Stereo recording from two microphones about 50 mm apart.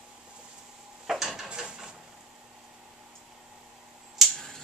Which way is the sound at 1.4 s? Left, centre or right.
Centre.